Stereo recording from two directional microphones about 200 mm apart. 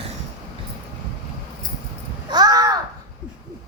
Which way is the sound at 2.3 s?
20° right (ahead or behind).